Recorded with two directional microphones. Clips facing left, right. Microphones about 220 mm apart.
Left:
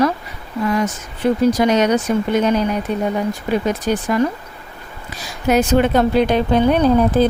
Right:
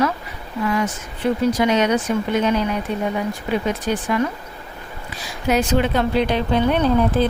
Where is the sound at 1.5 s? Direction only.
40° left (ahead or behind).